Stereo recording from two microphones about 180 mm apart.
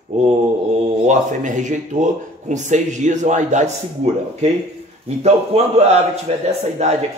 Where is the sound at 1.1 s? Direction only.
45° right (ahead or behind).